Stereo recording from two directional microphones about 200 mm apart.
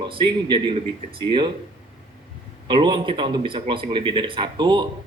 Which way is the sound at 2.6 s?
25° right (ahead or behind).